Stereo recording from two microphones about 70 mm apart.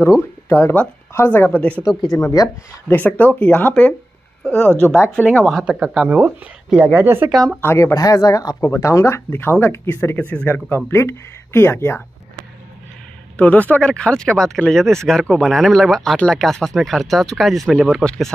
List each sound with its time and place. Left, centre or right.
0.2 s speech: left; by 1.8 s centre
2.1 s speech: left
2.9 s speech: left
5.6 s speech: centre
6.0 s speech: right
7.6 s speech: left
7.9 s speech: left
8.5 s speech: left
13.4 s speech: left
13.8 s speech: centre
18.0 s speech: centre